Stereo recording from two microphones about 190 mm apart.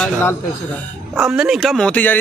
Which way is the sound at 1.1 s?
5° right (ahead or behind).